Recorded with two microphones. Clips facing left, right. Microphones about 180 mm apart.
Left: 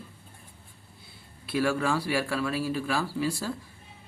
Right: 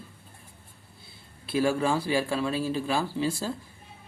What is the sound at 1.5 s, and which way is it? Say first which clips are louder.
Speech: right 2 dB; 25° right (ahead or behind).